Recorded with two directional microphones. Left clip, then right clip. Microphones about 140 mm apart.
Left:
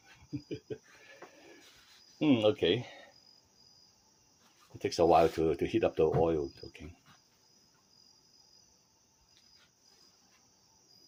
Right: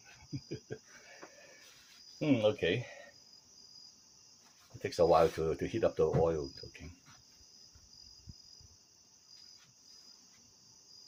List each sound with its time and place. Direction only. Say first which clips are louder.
2.1 s speech: left 3 dB; 60° left (ahead or behind)
4.8 s speech: left 2 dB; 50° left (ahead or behind)